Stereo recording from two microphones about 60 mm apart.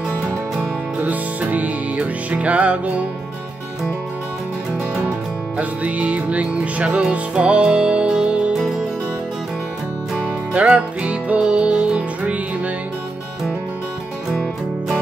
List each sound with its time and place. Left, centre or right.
0.9 s music: right
5.6 s music: right
10.2 s music: centre